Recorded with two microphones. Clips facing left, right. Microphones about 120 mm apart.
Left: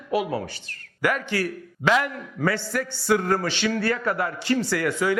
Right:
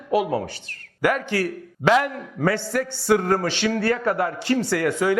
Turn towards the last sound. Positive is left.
turn(degrees=-50)  # may be behind; listen again after turning